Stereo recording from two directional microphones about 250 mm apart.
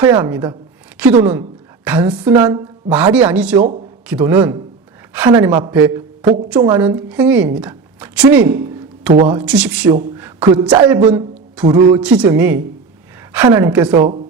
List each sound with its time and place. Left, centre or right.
0.0 s a woman's voice: centre
3.6 s speech: right
4.0 s a woman's voice: centre
10.2 s a sound: centre
11.6 s speech: centre
11.9 s speech: centre